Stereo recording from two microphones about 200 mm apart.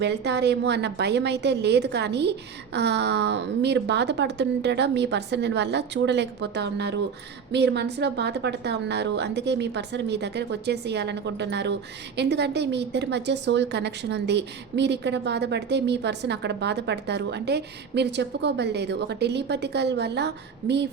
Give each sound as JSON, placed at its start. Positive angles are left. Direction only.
{"t": 0.0, "sound": "a woman's voice", "side_deg": -55}